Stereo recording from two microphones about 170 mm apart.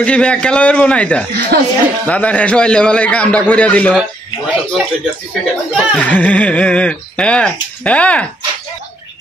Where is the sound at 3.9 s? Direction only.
5° right (ahead or behind).